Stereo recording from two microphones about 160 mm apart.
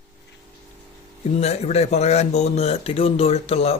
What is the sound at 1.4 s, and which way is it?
Speech, 40° left (ahead or behind).